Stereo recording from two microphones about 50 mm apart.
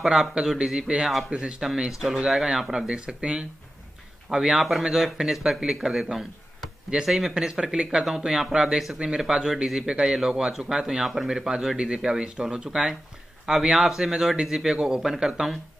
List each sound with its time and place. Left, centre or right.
0.0 s a man's voice: centre